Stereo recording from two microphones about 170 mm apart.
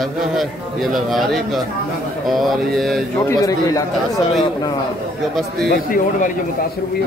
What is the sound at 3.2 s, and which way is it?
Speech, 20° left (ahead or behind).